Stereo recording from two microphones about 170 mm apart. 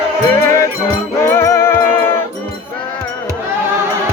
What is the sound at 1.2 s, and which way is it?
Music, 15° left (ahead or behind).